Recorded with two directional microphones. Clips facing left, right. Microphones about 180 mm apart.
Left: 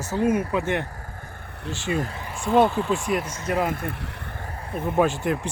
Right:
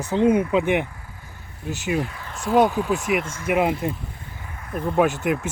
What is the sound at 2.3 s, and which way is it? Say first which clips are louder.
Vehicle: right 1 dB; centre (ahead or behind).